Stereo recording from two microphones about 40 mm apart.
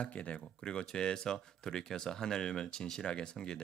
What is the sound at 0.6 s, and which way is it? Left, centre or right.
Speech, centre.